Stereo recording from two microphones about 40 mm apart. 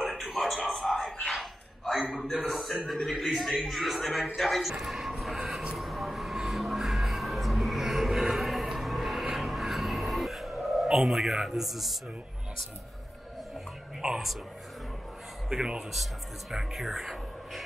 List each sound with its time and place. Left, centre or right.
0.3 s a sound: centre
1.3 s dog: centre
2.0 s a sound: centre
3.1 s a man's voice: centre
4.7 s music: centre
5.8 s a sound: centre
6.3 s music: centre
11.3 s a man's voice: centre
11.6 s a man's voice: centre
15.5 s speech: right
15.9 s a man's voice: centre